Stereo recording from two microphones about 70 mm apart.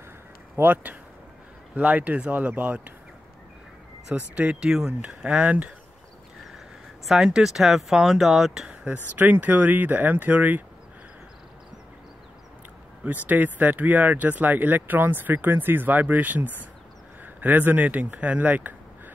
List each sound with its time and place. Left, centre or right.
0.6 s speech: right
4.4 s speech: centre
7.1 s speech: centre
8.8 s speech: right
13.0 s speech: right